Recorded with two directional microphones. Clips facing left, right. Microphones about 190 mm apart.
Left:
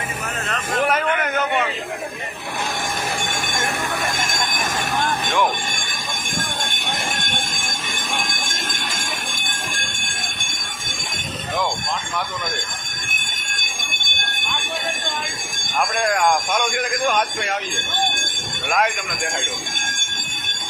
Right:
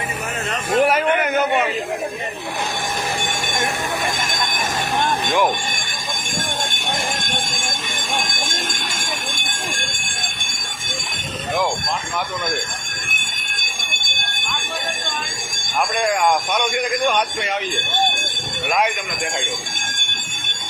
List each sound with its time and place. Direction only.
0.5 s a sound: 10° right (ahead or behind)
5.0 s music: 15° right (ahead or behind)
15.8 s speech: centre (ahead or behind)
18.7 s speech: centre (ahead or behind)